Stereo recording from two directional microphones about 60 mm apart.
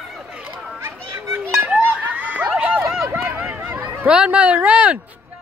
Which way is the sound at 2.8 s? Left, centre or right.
Centre.